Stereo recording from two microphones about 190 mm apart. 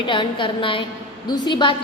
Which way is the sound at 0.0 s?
25° left (ahead or behind).